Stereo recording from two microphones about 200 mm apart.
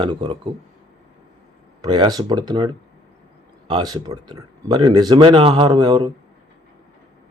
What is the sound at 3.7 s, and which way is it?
Speech, 20° right (ahead or behind).